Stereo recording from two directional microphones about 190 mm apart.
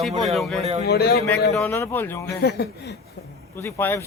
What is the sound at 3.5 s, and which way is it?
Speech, 15° left (ahead or behind).